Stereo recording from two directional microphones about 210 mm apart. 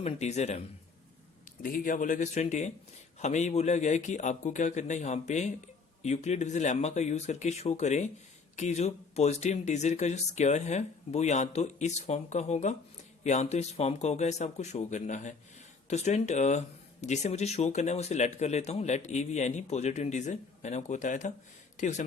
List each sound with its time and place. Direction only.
0.0 s speech: 30° left (ahead or behind)
1.6 s speech: 40° left (ahead or behind)